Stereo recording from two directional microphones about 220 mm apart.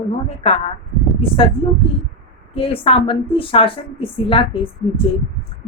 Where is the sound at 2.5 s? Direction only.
25° left (ahead or behind).